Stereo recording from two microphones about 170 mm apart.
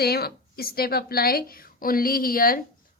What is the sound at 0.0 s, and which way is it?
Speech, 65° left (ahead or behind).